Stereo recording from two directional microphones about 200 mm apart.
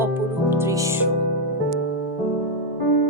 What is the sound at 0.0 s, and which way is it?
Music, 10° right (ahead or behind).